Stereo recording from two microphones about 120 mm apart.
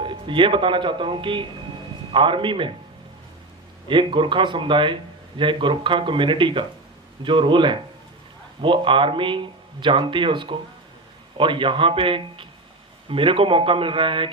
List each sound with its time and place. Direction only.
0.0 s speech: 45° right (ahead or behind)
3.8 s speech: 45° right (ahead or behind)